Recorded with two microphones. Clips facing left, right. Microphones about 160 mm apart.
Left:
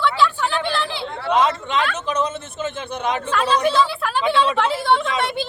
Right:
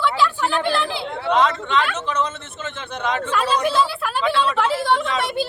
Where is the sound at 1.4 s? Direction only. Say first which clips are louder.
Even; 15° left (ahead or behind).